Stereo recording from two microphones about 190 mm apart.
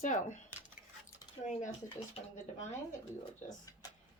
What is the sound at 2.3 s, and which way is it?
Speech, 40° left (ahead or behind).